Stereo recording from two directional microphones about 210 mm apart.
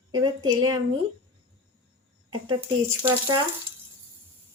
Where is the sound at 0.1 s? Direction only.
20° right (ahead or behind).